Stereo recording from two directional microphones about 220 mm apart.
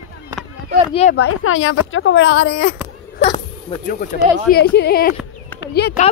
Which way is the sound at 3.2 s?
25° left (ahead or behind).